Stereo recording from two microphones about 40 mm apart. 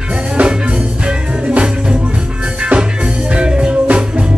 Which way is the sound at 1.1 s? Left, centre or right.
Right.